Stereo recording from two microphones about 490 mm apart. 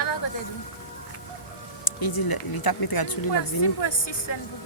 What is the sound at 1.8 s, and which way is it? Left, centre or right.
Speech, left.